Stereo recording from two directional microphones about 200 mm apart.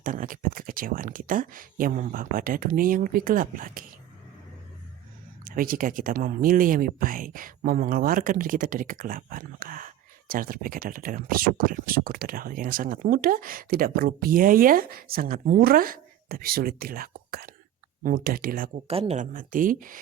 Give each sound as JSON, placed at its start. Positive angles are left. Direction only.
{"t": 0.0, "sound": "speech", "side_deg": -40}
{"t": 5.5, "sound": "speech", "side_deg": -45}
{"t": 18.9, "sound": "speech", "side_deg": -30}